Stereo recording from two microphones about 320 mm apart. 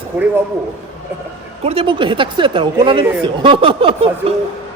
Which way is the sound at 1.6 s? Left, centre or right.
Centre.